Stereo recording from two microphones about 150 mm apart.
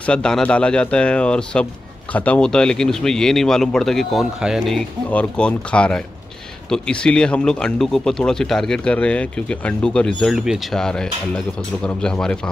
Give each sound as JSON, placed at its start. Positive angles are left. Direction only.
{"t": 0.0, "sound": "speech", "side_deg": 5}